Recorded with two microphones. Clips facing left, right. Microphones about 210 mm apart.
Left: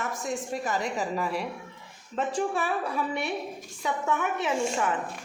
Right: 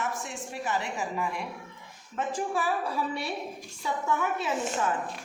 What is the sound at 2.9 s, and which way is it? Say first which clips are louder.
Speech: left 2 dB; 20° left (ahead or behind).